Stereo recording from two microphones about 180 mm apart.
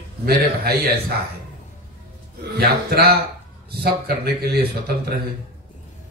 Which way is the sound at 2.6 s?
60° right (ahead or behind).